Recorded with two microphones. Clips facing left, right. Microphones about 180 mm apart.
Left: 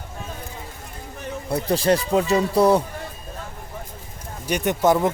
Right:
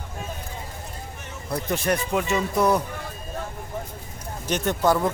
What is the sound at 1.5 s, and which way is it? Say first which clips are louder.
Speech: left 5 dB; 30° left (ahead or behind).